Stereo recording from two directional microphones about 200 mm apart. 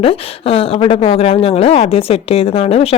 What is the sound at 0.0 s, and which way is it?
A woman's voice, 30° left (ahead or behind).